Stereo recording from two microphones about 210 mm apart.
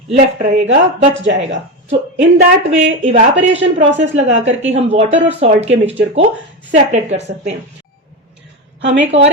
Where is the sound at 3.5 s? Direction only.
60° right (ahead or behind).